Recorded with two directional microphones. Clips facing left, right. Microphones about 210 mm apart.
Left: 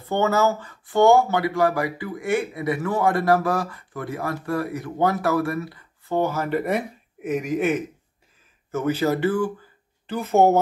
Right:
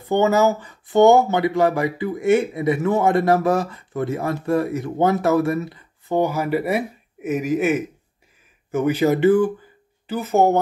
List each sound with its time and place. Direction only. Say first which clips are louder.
0.1 s speech: right 4 dB; 15° right (ahead or behind)
8.7 s speech: right 4 dB; 15° right (ahead or behind)
10.0 s speech: even; 5° right (ahead or behind)